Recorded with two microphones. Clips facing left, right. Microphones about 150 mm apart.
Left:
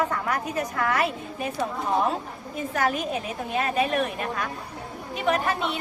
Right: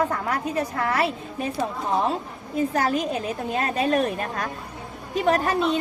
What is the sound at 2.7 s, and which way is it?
A woman's voice, 35° right (ahead or behind).